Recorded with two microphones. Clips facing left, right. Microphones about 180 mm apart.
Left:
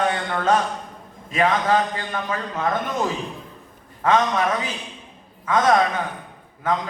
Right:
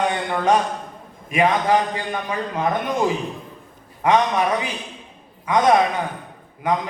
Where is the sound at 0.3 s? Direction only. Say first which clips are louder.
Right 2 dB; 15° right (ahead or behind).